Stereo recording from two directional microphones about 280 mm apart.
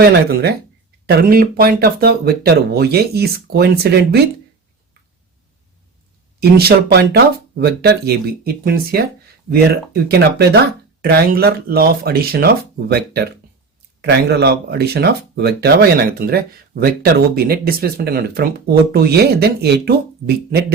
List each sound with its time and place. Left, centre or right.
1.0 s speech: right
6.6 s speech: right